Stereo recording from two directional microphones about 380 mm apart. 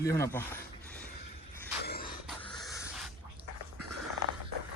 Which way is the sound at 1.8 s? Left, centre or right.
Left.